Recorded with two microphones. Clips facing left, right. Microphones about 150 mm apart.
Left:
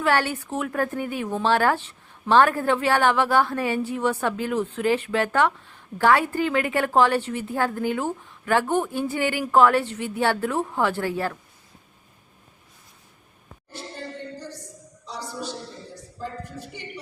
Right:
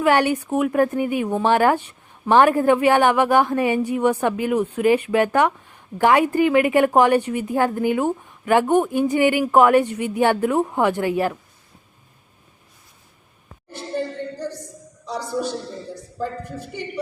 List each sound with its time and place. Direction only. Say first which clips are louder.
0.0 s speech: right 5 dB; 15° right (ahead or behind)
15.0 s a woman's voice: right 8 dB; 55° right (ahead or behind)